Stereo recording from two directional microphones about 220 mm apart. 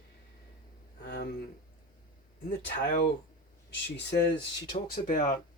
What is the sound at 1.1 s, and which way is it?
Speech, 50° left (ahead or behind).